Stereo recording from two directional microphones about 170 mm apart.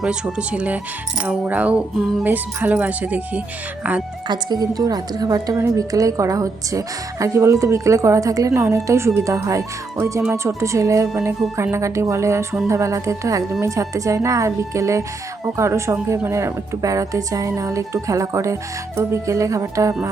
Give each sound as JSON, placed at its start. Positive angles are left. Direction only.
{"t": 0.0, "sound": "speech", "side_deg": -5}
{"t": 4.3, "sound": "a woman's voice", "side_deg": -25}